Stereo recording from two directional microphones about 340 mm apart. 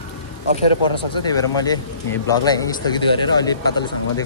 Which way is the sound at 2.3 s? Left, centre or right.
Centre.